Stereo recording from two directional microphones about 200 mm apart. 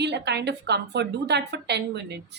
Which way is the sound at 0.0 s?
55° right (ahead or behind).